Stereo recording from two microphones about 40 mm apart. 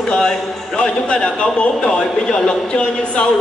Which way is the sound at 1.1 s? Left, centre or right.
Centre.